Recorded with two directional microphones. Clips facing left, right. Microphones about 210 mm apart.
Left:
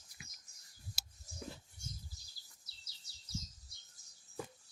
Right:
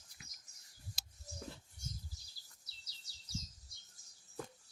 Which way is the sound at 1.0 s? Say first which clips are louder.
Left 2 dB; 5° left (ahead or behind).